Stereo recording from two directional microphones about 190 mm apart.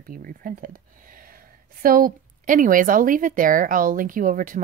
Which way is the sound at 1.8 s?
50° right (ahead or behind).